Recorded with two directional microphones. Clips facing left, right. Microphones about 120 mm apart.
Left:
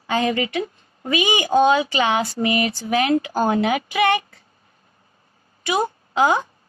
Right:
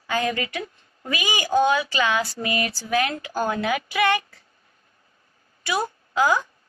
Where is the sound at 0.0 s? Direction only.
25° left (ahead or behind).